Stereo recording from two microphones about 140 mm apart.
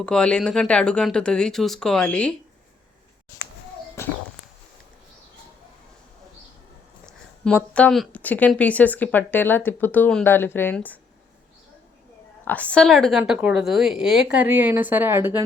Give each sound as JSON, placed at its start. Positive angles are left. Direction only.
{"t": 0.0, "sound": "a woman's voice", "side_deg": 5}
{"t": 4.0, "sound": "a sound", "side_deg": 20}
{"t": 7.0, "sound": "a woman's voice", "side_deg": 5}
{"t": 12.5, "sound": "speech", "side_deg": 10}